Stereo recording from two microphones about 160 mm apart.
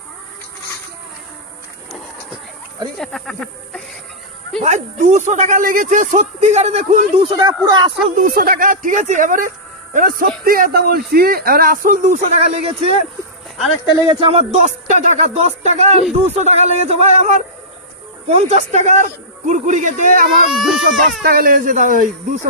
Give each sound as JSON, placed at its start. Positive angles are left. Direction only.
{"t": 3.0, "sound": "speech", "side_deg": 0}
{"t": 4.6, "sound": "speech", "side_deg": -50}
{"t": 7.2, "sound": "speech", "side_deg": -25}
{"t": 8.2, "sound": "speech", "side_deg": -65}
{"t": 14.2, "sound": "speech", "side_deg": -40}
{"t": 20.5, "sound": "speech", "side_deg": 0}
{"t": 21.3, "sound": "speech", "side_deg": -65}